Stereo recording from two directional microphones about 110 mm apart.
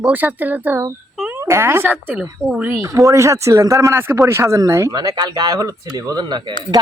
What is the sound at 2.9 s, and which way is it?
Speech, 30° right (ahead or behind).